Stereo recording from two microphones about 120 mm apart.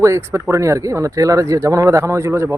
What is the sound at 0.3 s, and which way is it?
Speech, 20° right (ahead or behind).